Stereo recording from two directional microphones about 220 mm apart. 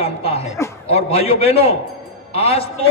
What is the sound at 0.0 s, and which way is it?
A man's voice, 25° left (ahead or behind).